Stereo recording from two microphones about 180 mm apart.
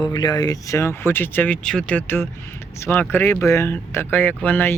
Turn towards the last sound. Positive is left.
turn(degrees=10)  # may be behind; listen again after turning